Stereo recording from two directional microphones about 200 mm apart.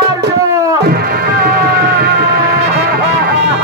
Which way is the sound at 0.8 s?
50° right (ahead or behind).